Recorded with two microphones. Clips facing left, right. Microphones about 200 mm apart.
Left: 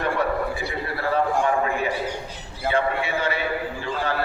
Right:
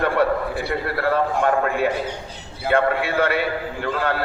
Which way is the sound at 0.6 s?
65° right (ahead or behind).